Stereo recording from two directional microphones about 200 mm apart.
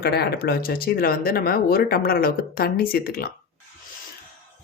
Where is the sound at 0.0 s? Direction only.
55° left (ahead or behind).